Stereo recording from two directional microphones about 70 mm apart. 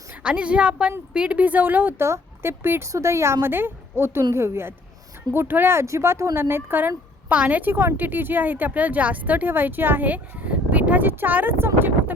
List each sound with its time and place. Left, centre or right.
0.2 s a woman's voice: centre
2.0 s a woman's voice: right
5.8 s a woman's voice: right